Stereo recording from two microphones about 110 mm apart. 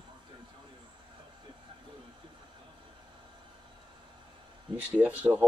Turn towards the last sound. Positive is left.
turn(degrees=-15)  # may be behind; listen again after turning